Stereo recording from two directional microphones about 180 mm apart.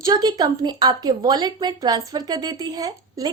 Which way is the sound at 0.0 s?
20° right (ahead or behind).